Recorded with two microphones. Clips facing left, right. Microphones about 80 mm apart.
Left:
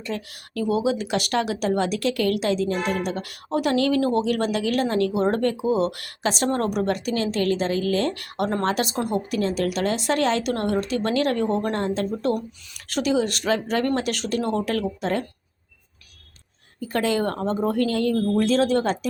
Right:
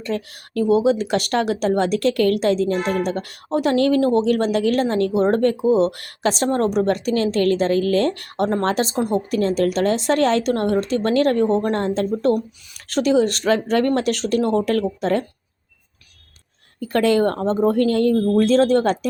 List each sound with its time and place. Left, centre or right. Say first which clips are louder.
0.0 s speech: right 5 dB; right
6.8 s speech: right 5 dB; right
9.3 s speech: right 5 dB; right
16.8 s speech: right 6 dB; right